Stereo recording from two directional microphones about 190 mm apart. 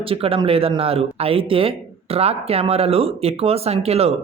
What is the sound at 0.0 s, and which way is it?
Speech, 30° right (ahead or behind).